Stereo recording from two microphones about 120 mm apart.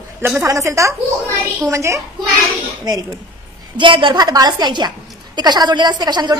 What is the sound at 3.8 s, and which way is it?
A woman's voice, 45° right (ahead or behind).